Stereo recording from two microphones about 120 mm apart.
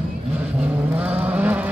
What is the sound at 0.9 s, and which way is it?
Vehicle, 10° right (ahead or behind).